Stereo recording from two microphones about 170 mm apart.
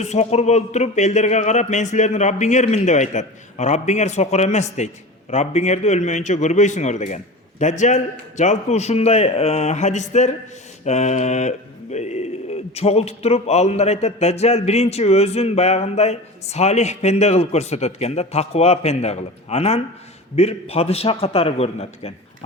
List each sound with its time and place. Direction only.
0.0 s a man's voice: 40° left (ahead or behind)